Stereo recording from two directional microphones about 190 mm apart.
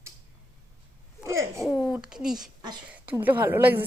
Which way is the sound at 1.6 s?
5° right (ahead or behind).